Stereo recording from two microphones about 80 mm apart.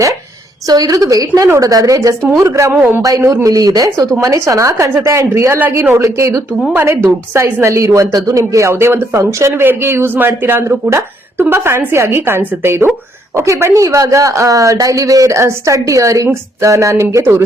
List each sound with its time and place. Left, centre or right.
0.7 s a woman's voice: right
6.7 s a woman's voice: right